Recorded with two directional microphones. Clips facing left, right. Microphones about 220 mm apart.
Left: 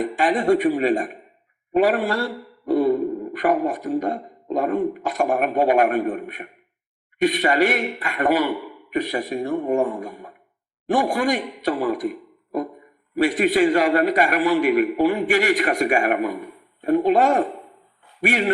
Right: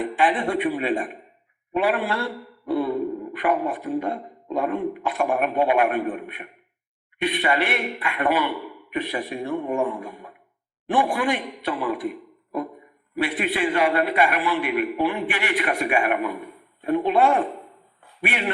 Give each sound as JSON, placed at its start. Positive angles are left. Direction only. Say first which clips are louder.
{"t": 0.0, "sound": "a man's voice", "louder": "left 2 dB", "side_deg": 40}
{"t": 13.1, "sound": "speech", "louder": "left 7 dB", "side_deg": 40}